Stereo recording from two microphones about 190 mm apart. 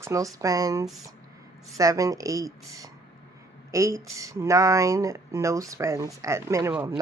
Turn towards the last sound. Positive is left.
turn(degrees=-15)  # may be behind; listen again after turning